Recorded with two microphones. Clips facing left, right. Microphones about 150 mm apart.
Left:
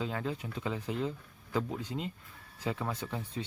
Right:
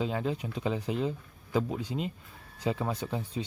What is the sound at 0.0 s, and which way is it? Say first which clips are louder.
Speech: right 4 dB; 20° right (ahead or behind).